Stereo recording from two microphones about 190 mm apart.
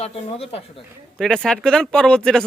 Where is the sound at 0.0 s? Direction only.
30° left (ahead or behind).